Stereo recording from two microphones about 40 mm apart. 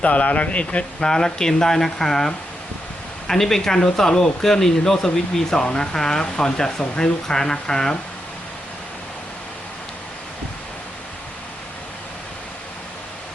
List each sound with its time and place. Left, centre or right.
0.0 s speech: left
0.9 s speech: centre